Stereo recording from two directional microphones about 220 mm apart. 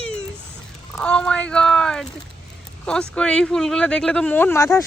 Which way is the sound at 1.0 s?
5° left (ahead or behind).